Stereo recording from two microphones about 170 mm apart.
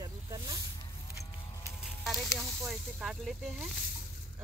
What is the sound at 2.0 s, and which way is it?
Speech, centre (ahead or behind).